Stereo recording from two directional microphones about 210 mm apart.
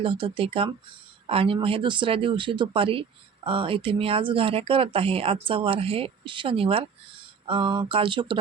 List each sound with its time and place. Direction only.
0.0 s speech: 25° right (ahead or behind)